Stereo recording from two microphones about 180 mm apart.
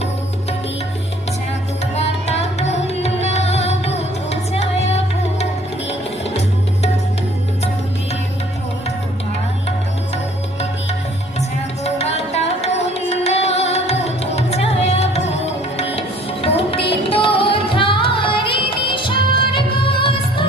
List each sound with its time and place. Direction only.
2.0 s music: 35° left (ahead or behind)
11.8 s music: 35° left (ahead or behind)